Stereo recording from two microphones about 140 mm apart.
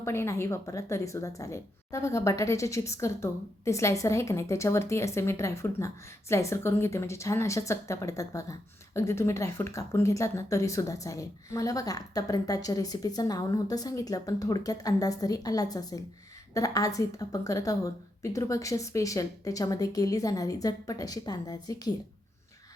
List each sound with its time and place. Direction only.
0.0 s speech: 20° left (ahead or behind)